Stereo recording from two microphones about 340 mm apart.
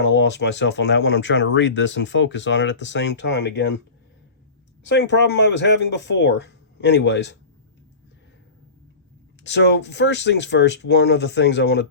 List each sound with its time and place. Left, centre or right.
0.0 s speech: left
4.8 s speech: left
9.4 s speech: left